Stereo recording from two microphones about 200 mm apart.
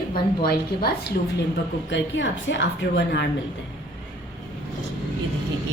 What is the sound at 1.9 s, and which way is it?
A woman's voice, 65° left (ahead or behind).